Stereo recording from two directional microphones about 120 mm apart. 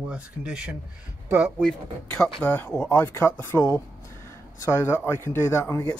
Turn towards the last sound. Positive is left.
turn(degrees=25)  # may be behind; listen again after turning